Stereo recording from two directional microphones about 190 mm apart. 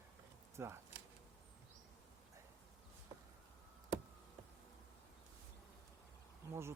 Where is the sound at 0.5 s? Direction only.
15° right (ahead or behind).